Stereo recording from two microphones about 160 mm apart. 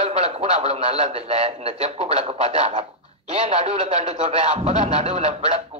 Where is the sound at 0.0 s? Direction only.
40° right (ahead or behind).